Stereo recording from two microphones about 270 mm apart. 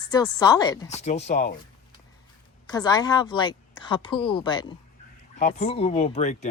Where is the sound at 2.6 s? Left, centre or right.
Centre.